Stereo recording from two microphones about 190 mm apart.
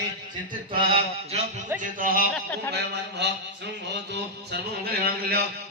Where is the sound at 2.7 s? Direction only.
65° right (ahead or behind).